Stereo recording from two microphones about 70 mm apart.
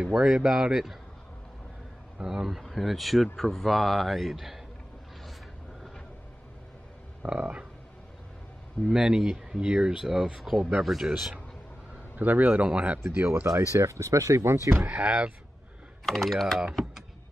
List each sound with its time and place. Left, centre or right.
0.0 s speech: centre
2.1 s a man's voice: centre
7.2 s speech: centre
8.9 s a man's voice: centre
12.2 s speech: right
13.6 s speech: right
16.1 s a man's voice: centre